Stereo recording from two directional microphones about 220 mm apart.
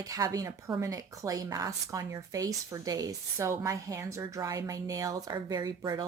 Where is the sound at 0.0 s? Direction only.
15° right (ahead or behind).